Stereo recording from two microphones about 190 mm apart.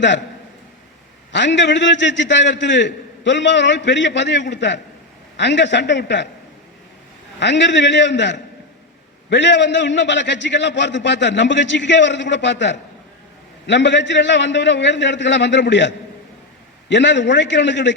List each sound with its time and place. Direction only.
1.3 s a man's voice: 70° left (ahead or behind)
7.3 s a man's voice: 70° left (ahead or behind)
16.9 s a man's voice: 70° left (ahead or behind)